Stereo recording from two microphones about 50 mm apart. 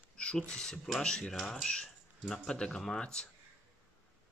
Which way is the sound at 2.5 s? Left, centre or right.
Centre.